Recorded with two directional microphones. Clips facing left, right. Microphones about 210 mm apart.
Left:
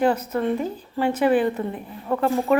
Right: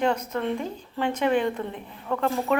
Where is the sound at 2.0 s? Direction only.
20° left (ahead or behind).